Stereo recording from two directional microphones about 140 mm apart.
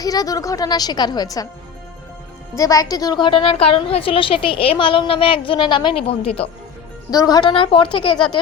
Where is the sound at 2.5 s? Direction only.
25° left (ahead or behind); by 6.5 s 45° left (ahead or behind).